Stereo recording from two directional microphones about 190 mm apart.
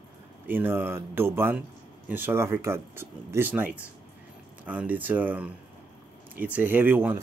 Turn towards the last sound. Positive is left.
turn(degrees=-10)  # may be behind; listen again after turning